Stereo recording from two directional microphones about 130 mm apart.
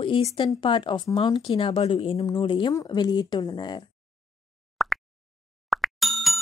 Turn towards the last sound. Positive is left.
turn(degrees=0)  # may be behind; listen again after turning